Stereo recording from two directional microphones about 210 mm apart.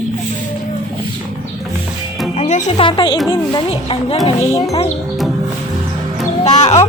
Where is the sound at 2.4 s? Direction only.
35° left (ahead or behind).